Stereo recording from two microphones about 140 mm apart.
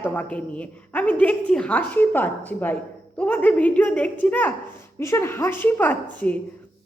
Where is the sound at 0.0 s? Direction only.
10° left (ahead or behind).